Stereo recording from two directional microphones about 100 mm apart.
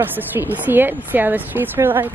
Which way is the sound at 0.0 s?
20° right (ahead or behind).